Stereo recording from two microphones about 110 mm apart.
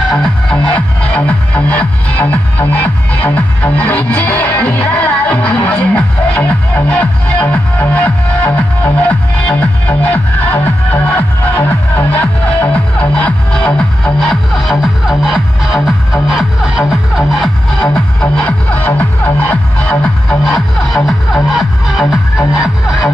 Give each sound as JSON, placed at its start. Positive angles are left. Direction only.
{"t": 0.1, "sound": "music", "side_deg": 5}
{"t": 17.7, "sound": "music", "side_deg": 10}
{"t": 20.4, "sound": "music", "side_deg": 0}